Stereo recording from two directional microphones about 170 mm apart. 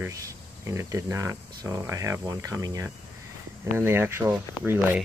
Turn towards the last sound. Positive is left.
turn(degrees=-15)  # may be behind; listen again after turning